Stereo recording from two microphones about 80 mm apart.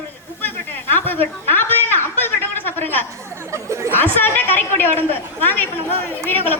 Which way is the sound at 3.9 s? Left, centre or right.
Left.